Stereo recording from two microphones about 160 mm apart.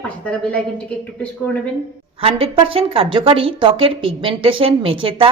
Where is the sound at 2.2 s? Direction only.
35° right (ahead or behind).